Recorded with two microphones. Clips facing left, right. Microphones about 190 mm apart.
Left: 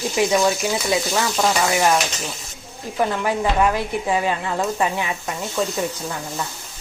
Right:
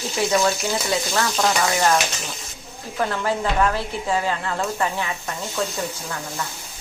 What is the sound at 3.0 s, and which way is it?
Speech, 10° left (ahead or behind).